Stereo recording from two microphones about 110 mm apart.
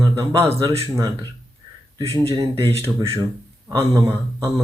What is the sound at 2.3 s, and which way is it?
Speech, 30° right (ahead or behind).